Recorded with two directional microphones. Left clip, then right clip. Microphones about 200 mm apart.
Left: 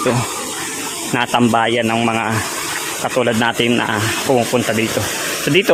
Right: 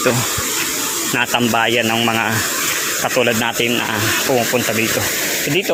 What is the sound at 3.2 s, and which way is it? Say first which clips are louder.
Sanding: left 2 dB; 25° left (ahead or behind).